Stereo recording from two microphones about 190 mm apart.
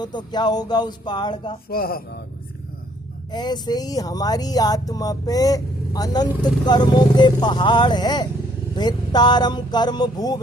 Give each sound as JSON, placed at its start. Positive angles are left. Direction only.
{"t": 0.0, "sound": "speech", "side_deg": 20}
{"t": 1.7, "sound": "speech", "side_deg": 55}
{"t": 3.3, "sound": "speech", "side_deg": 20}